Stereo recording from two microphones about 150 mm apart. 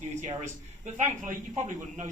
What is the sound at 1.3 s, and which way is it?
Speech, 60° right (ahead or behind).